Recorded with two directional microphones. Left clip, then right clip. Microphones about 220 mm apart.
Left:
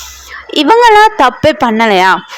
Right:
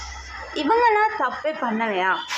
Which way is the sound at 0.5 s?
45° left (ahead or behind).